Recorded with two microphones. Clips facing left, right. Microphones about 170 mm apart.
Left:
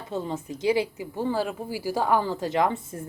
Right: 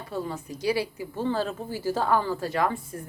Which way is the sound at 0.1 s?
20° left (ahead or behind).